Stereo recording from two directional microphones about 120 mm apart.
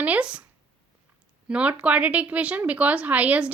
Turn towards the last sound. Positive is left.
turn(degrees=-10)  # may be behind; listen again after turning